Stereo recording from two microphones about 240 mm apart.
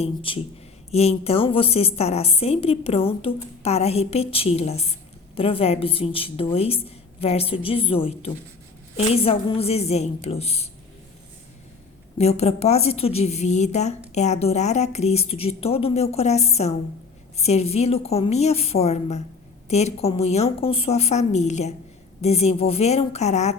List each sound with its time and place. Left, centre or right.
0.0 s a woman's voice: left
12.1 s a woman's voice: left